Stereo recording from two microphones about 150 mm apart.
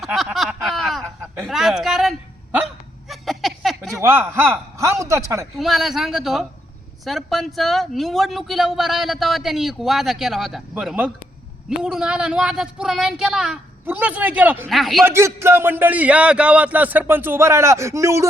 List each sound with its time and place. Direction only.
0.0 s a sound: centre (ahead or behind)
1.2 s speech: centre (ahead or behind)
3.1 s a sound: centre (ahead or behind)
4.0 s a man's voice: 15° right (ahead or behind)
5.5 s speech: centre (ahead or behind)
14.7 s speech: centre (ahead or behind)
15.0 s a man's voice: 15° right (ahead or behind)